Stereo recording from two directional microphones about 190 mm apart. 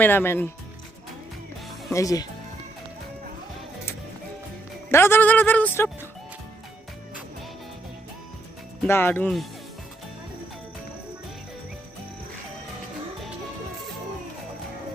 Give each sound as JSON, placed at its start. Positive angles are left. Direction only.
{"t": 0.0, "sound": "speech", "side_deg": 10}
{"t": 1.9, "sound": "speech", "side_deg": 15}
{"t": 4.9, "sound": "speech", "side_deg": 15}
{"t": 8.9, "sound": "speech", "side_deg": 10}